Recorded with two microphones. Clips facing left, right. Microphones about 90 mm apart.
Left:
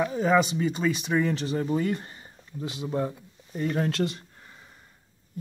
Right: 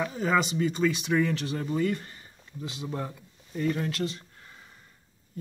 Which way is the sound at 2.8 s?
20° left (ahead or behind).